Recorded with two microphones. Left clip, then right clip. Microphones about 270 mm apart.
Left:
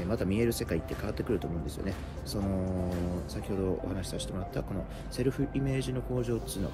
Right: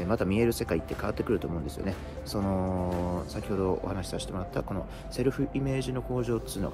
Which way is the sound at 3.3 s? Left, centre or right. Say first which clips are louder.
Right 3 dB; centre.